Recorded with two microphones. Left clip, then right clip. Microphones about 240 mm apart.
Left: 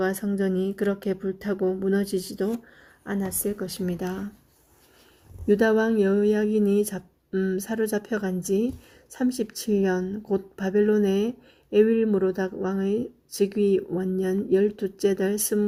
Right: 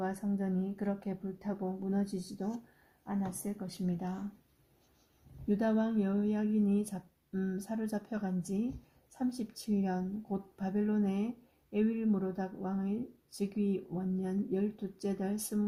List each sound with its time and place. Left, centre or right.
0.0 s speech: left
5.5 s speech: left